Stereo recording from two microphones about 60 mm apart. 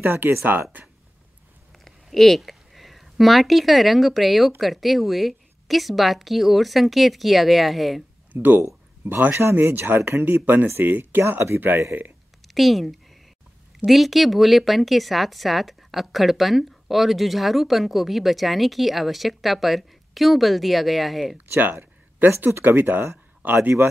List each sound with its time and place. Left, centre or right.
0.0 s speech: right
1.9 s speech: centre
8.3 s speech: right
12.5 s speech: centre
21.5 s a sound: right
22.4 s speech: right